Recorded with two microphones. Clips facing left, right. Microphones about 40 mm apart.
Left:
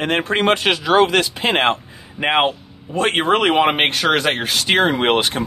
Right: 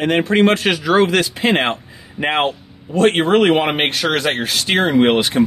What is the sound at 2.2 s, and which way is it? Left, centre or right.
Speech, centre.